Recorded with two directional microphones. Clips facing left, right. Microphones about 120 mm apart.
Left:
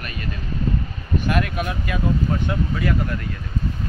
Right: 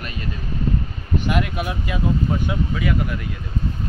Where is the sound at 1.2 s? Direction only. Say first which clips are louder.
Even; 20° right (ahead or behind).